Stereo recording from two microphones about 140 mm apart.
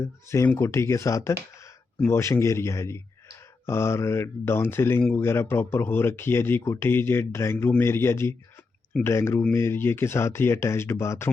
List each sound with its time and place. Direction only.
0.0 s speech: 20° left (ahead or behind)